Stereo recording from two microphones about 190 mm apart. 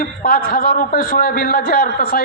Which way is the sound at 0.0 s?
50° left (ahead or behind).